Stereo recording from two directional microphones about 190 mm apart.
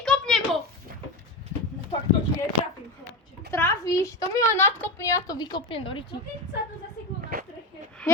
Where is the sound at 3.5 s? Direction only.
15° left (ahead or behind).